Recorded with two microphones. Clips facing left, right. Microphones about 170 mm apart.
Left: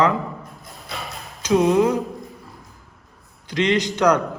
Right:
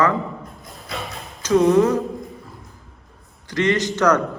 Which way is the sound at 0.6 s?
Centre (ahead or behind).